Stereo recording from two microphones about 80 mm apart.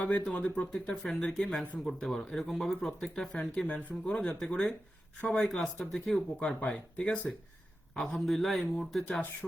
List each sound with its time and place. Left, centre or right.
0.3 s speech: centre